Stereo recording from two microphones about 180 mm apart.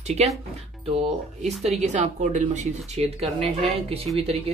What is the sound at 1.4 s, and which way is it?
Speech, 40° right (ahead or behind).